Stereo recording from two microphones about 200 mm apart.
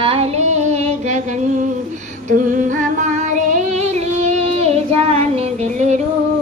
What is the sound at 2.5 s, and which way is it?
Music, 40° right (ahead or behind).